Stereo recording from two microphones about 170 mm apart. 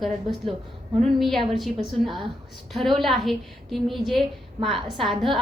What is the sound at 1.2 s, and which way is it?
A woman's voice, centre (ahead or behind).